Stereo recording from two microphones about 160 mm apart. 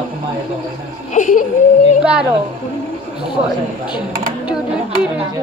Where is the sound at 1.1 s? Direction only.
55° left (ahead or behind).